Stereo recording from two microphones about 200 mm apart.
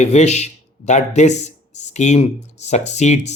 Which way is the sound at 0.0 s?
35° left (ahead or behind).